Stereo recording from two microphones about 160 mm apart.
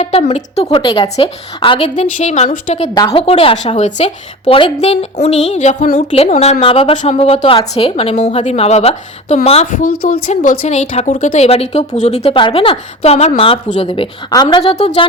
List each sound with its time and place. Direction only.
0.0 s a woman's voice: 40° left (ahead or behind)
2.1 s a woman's voice: 45° left (ahead or behind)
6.9 s a woman's voice: 45° left (ahead or behind)
10.1 s speech: 55° left (ahead or behind)
11.3 s a woman's voice: 40° left (ahead or behind)